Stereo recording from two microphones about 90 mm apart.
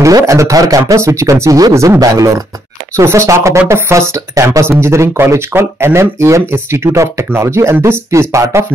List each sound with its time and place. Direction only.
0.0 s speech: 35° right (ahead or behind)